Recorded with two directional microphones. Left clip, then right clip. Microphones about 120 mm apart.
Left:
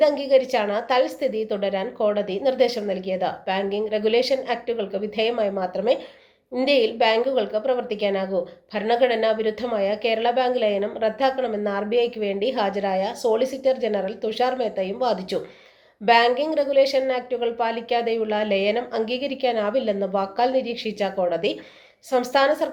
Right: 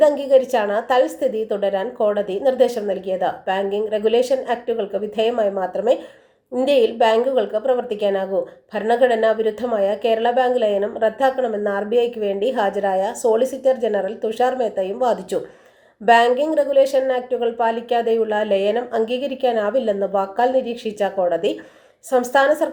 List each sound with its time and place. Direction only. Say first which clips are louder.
0.3 s a woman's voice: right 3 dB; centre (ahead or behind)
19.1 s a woman's voice: right 3 dB; 45° left (ahead or behind)
19.4 s a woman's voice: right 4 dB; 5° right (ahead or behind)